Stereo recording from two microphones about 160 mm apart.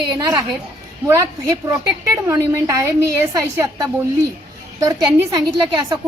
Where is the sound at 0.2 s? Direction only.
25° right (ahead or behind).